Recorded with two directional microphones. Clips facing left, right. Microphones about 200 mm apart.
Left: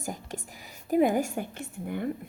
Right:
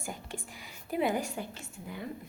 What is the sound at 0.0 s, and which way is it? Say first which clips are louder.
Whispering: left 5 dB; 40° left (ahead or behind).